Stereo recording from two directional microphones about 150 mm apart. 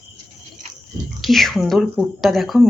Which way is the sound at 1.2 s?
Centre (ahead or behind).